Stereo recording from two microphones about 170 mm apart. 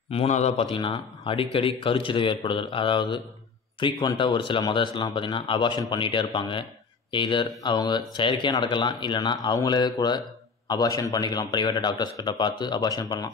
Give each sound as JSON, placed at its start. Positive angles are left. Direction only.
{"t": 0.1, "sound": "a man's voice", "side_deg": 40}